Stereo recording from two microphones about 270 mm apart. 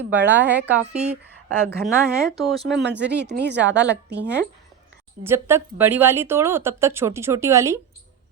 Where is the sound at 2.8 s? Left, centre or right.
Right.